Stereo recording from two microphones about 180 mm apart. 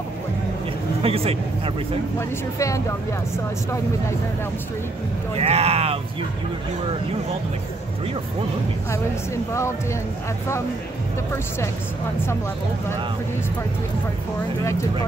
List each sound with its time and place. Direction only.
1.0 s speech: 30° right (ahead or behind)
2.1 s speech: 15° left (ahead or behind)
5.4 s speech: 35° right (ahead or behind)
8.9 s speech: 15° left (ahead or behind)
14.6 s speech: 15° left (ahead or behind)